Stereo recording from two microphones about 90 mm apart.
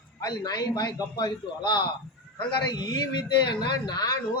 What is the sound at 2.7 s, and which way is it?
Speech, 45° left (ahead or behind).